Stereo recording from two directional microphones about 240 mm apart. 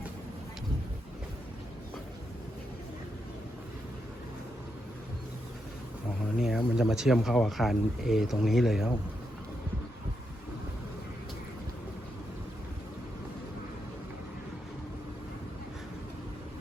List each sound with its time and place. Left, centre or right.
6.4 s speech: centre